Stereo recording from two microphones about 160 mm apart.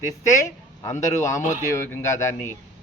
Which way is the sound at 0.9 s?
50° left (ahead or behind).